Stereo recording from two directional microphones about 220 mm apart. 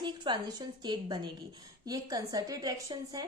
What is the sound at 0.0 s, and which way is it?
A woman's voice, 20° right (ahead or behind).